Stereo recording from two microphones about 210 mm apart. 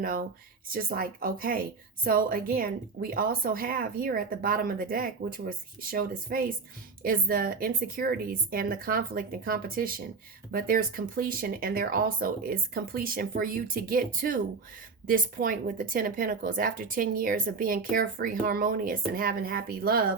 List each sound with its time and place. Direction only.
0.0 s a woman's voice: 40° right (ahead or behind)